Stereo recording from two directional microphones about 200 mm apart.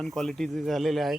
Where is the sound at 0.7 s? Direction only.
Centre (ahead or behind).